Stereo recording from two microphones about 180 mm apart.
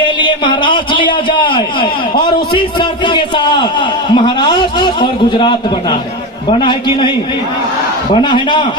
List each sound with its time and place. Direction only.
0.2 s a man's voice: 25° left (ahead or behind)
8.1 s a man's voice: 25° left (ahead or behind)